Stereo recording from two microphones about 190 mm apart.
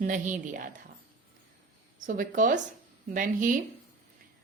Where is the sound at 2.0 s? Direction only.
45° right (ahead or behind).